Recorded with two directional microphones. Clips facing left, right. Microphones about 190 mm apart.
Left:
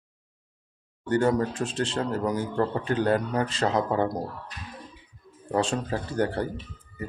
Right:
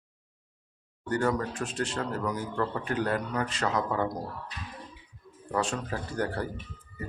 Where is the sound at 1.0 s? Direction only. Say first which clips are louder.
Left 5 dB; 25° left (ahead or behind).